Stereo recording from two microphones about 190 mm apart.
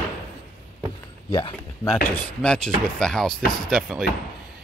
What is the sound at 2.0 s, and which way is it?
Speech, 5° left (ahead or behind).